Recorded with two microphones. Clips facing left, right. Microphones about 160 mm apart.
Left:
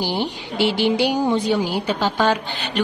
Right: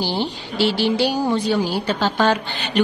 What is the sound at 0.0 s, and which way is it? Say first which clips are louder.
A woman's voice: even; 15° left (ahead or behind).